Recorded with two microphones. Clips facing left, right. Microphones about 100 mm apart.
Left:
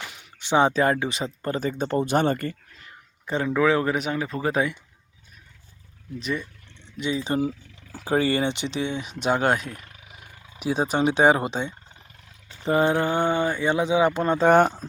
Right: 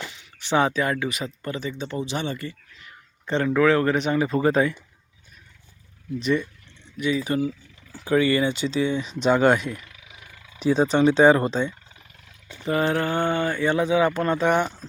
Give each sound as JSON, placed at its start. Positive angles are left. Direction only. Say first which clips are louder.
{"t": 0.3, "sound": "a sound", "louder": "left 1 dB", "side_deg": 20}
{"t": 0.7, "sound": "speech", "louder": "left 3 dB", "side_deg": 35}
{"t": 3.2, "sound": "speech", "louder": "right 2 dB", "side_deg": 10}
{"t": 6.1, "sound": "speech", "louder": "right 6 dB", "side_deg": 5}
{"t": 6.9, "sound": "speech", "louder": "right 2 dB", "side_deg": 25}
{"t": 9.2, "sound": "speech", "louder": "right 4 dB", "side_deg": 5}
{"t": 9.6, "sound": "roaring cats", "louder": "right 5 dB", "side_deg": 45}
{"t": 10.6, "sound": "speech", "louder": "right 4 dB", "side_deg": 10}
{"t": 14.4, "sound": "speech", "louder": "left 7 dB", "side_deg": 40}